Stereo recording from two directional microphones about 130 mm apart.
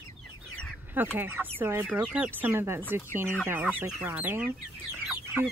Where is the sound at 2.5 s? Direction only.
20° right (ahead or behind).